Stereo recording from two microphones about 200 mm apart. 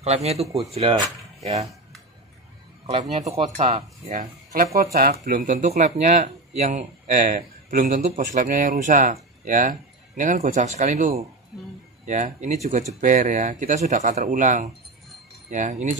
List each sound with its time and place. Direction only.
0.0 s speech: 30° right (ahead or behind)
2.9 s speech: 30° right (ahead or behind)